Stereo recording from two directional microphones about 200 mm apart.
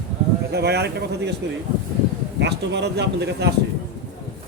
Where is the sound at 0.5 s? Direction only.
55° right (ahead or behind).